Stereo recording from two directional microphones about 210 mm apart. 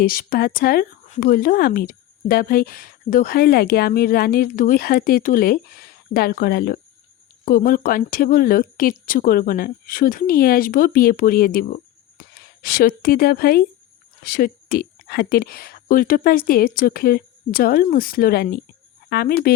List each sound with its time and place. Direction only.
0.0 s speech: 45° left (ahead or behind)